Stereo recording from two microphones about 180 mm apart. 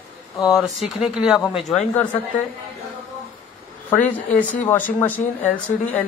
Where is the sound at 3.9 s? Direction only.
10° left (ahead or behind).